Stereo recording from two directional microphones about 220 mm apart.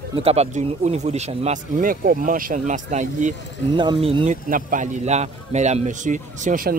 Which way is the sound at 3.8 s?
25° right (ahead or behind).